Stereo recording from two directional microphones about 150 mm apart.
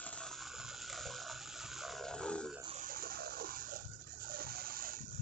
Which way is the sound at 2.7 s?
75° right (ahead or behind).